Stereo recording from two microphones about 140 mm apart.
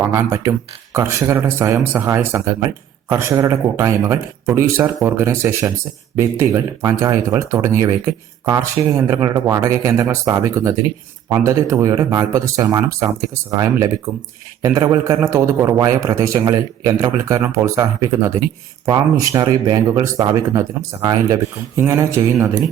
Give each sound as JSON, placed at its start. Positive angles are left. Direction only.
{"t": 0.0, "sound": "speech", "side_deg": -20}
{"t": 19.3, "sound": "speech", "side_deg": -30}